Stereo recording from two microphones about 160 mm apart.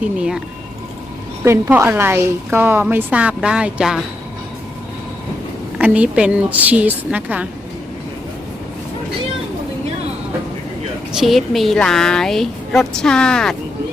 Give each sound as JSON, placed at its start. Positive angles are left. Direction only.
{"t": 0.0, "sound": "a woman's voice", "side_deg": -5}
{"t": 1.5, "sound": "a woman's voice", "side_deg": -15}
{"t": 5.7, "sound": "a woman's voice", "side_deg": -10}
{"t": 11.1, "sound": "a woman's voice", "side_deg": 0}